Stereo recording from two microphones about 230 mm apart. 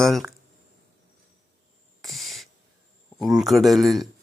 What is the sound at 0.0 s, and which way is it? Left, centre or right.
Speech, centre.